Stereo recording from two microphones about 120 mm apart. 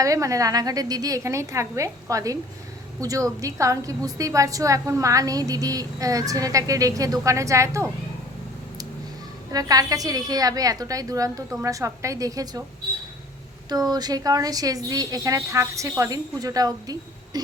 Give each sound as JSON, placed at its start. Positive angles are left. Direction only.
{"t": 0.0, "sound": "a woman's voice", "side_deg": -25}
{"t": 9.5, "sound": "a woman's voice", "side_deg": -30}
{"t": 13.7, "sound": "a woman's voice", "side_deg": -35}